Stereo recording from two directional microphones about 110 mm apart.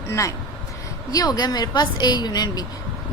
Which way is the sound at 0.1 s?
30° left (ahead or behind).